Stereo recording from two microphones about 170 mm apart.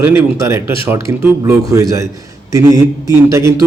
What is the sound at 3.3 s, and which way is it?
Speech, 20° right (ahead or behind).